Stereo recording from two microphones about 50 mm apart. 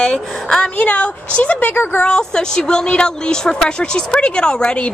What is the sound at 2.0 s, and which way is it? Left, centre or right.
A woman's voice, centre.